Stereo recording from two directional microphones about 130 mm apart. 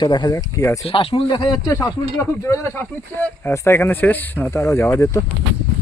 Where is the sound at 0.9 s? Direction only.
45° left (ahead or behind); by 5.2 s 20° left (ahead or behind).